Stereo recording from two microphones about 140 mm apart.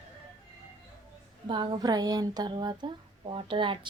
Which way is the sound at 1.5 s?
35° right (ahead or behind).